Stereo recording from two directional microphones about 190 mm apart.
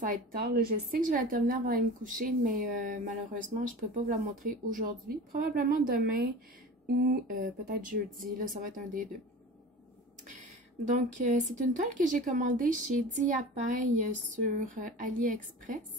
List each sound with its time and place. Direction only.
0.0 s a woman's voice: 50° right (ahead or behind)
10.9 s a woman's voice: 40° right (ahead or behind)